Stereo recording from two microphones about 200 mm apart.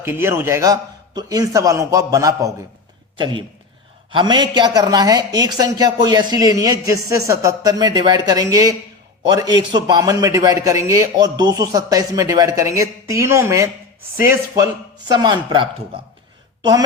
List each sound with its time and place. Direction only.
0.0 s a man's voice: 10° right (ahead or behind)